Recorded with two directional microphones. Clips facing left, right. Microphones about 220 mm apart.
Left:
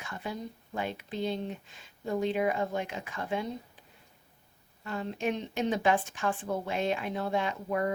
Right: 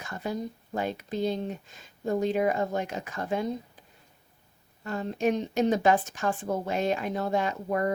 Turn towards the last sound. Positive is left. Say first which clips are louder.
# right 3 dB
turn(degrees=-40)  # may be behind; listen again after turning